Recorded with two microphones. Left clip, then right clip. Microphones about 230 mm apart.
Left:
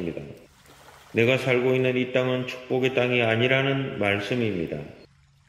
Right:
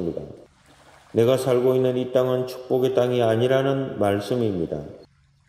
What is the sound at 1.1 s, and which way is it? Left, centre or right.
A man's voice, right.